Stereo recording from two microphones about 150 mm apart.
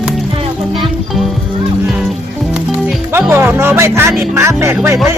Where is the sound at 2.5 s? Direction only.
10° right (ahead or behind).